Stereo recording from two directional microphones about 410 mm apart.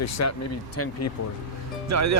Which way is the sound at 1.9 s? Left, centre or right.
Right.